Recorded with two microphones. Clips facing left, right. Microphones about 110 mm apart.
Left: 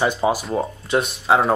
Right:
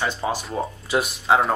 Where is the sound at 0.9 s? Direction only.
Centre (ahead or behind).